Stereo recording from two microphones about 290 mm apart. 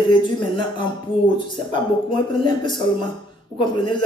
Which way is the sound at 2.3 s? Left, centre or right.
Centre.